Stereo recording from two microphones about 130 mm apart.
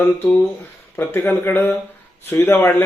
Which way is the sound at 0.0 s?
15° left (ahead or behind).